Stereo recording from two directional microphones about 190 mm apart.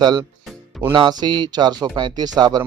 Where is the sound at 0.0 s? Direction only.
25° right (ahead or behind).